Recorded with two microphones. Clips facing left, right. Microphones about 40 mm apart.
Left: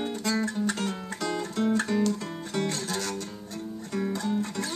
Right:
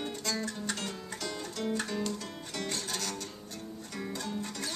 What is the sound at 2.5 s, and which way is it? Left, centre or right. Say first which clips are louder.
Music: left 7 dB; left.